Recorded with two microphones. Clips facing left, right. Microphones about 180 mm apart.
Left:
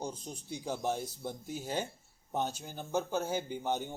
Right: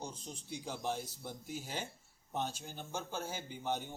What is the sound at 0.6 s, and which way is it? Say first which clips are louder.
Speech: left 5 dB; 45° left (ahead or behind).